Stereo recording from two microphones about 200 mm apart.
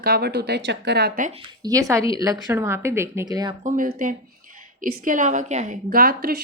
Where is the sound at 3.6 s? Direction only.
45° right (ahead or behind).